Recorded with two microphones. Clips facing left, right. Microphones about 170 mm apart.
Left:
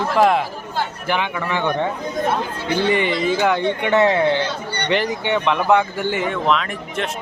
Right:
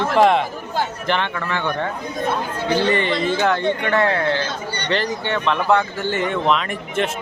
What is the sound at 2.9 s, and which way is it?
Speech, 10° left (ahead or behind).